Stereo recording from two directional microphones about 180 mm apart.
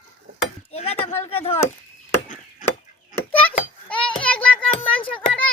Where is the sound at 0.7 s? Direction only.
35° left (ahead or behind).